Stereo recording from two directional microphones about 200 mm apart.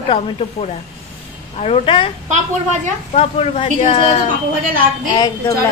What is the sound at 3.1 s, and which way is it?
Speech, 30° left (ahead or behind).